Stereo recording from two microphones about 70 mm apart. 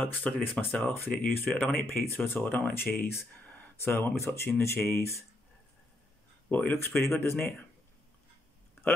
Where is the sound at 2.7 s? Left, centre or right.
Left.